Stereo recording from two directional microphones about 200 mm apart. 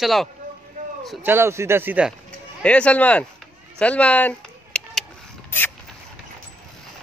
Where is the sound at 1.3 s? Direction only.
10° right (ahead or behind).